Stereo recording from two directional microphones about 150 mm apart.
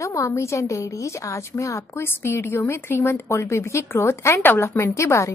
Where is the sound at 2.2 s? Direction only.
15° left (ahead or behind).